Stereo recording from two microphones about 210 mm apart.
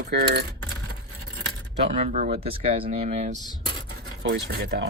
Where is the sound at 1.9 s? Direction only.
35° right (ahead or behind).